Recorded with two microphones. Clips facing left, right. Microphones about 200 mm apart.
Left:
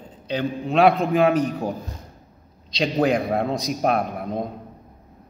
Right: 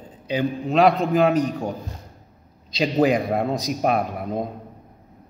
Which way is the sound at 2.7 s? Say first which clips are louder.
Right 1 dB; 5° right (ahead or behind).